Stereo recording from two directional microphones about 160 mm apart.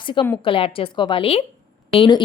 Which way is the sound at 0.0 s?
30° left (ahead or behind).